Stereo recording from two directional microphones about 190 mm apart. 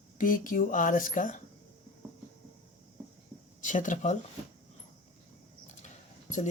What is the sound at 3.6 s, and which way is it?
Speech, 40° left (ahead or behind).